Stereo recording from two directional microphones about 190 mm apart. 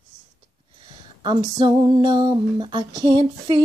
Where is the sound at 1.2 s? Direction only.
20° right (ahead or behind).